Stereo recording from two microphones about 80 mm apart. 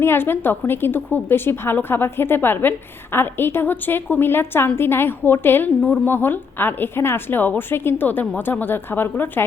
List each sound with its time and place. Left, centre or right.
0.0 s a woman's voice: left